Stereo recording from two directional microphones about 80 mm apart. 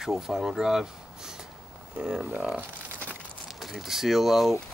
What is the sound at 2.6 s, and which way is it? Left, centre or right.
Crumpling, right.